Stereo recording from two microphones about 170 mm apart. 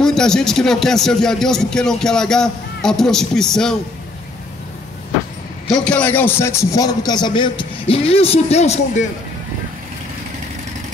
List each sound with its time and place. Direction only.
0.0 s a man's voice: 5° left (ahead or behind)
5.7 s a man's voice: 5° left (ahead or behind); by 9.0 s 40° left (ahead or behind)